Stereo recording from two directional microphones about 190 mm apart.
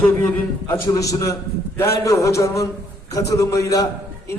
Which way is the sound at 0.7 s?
15° left (ahead or behind).